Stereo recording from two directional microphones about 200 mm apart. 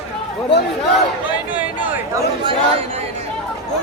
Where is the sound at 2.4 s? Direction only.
30° right (ahead or behind).